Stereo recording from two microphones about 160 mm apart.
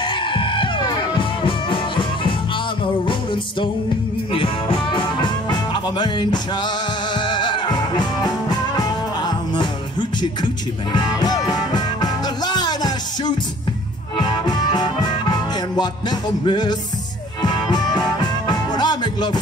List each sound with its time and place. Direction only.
0.0 s music: 30° left (ahead or behind)
4.3 s music: 35° left (ahead or behind)